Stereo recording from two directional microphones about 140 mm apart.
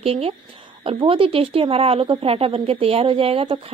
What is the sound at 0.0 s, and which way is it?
Speech, 45° right (ahead or behind).